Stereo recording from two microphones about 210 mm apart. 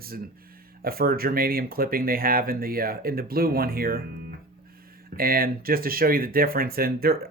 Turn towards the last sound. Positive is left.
turn(degrees=-45)  # may be behind; listen again after turning